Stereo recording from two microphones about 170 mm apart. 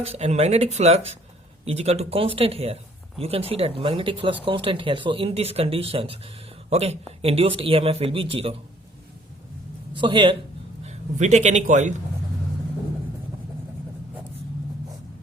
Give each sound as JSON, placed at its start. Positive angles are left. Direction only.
{"t": 0.0, "sound": "speech", "side_deg": -40}
{"t": 9.9, "sound": "speech", "side_deg": -30}
{"t": 10.8, "sound": "a man's voice", "side_deg": -40}